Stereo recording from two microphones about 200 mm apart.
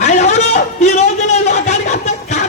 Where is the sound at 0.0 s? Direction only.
35° left (ahead or behind).